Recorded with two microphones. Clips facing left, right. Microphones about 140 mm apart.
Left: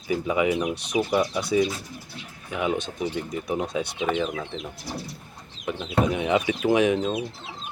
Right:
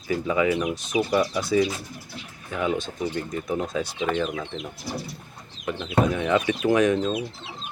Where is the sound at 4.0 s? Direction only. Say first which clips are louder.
Even; 5° left (ahead or behind).